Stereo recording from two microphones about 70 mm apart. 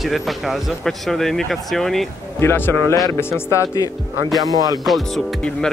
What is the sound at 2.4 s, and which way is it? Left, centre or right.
Speech, left.